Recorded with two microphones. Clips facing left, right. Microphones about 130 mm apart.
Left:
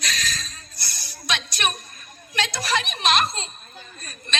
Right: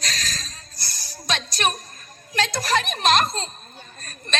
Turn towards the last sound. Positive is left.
turn(degrees=-45)  # may be behind; listen again after turning